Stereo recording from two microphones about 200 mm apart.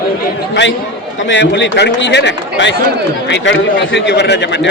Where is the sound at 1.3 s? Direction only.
65° left (ahead or behind).